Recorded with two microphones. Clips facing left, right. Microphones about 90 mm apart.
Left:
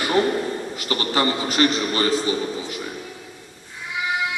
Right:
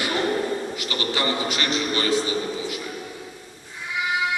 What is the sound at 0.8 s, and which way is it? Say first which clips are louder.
A man's voice: left 4 dB; 40° left (ahead or behind).